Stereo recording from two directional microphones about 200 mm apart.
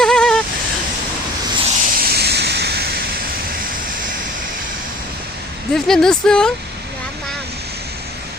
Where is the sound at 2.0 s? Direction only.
50° right (ahead or behind).